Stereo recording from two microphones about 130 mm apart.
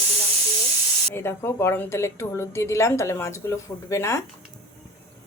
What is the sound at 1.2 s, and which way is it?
A woman's voice, 20° left (ahead or behind).